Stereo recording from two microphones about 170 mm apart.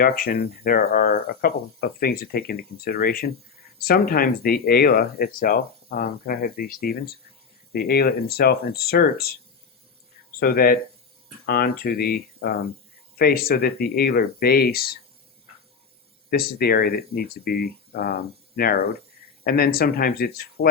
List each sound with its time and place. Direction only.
0.0 s speech: 60° left (ahead or behind)
10.4 s speech: 60° left (ahead or behind)
16.3 s speech: 65° left (ahead or behind)